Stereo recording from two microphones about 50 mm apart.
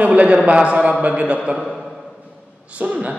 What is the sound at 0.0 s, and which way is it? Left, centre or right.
A man's voice, right.